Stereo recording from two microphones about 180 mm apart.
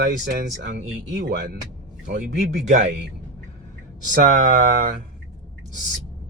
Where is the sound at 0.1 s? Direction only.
55° right (ahead or behind).